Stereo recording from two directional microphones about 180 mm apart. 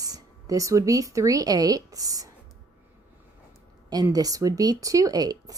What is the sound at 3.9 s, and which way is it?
Speech, 20° right (ahead or behind).